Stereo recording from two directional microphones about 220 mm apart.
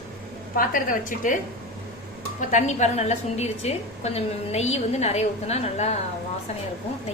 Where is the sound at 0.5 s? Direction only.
40° left (ahead or behind).